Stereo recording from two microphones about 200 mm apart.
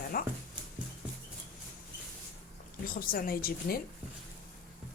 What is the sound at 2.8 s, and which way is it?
Speech, 45° left (ahead or behind).